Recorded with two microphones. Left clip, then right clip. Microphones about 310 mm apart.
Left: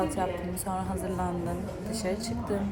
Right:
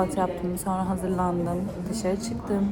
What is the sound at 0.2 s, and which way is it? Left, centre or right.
A woman's voice, centre.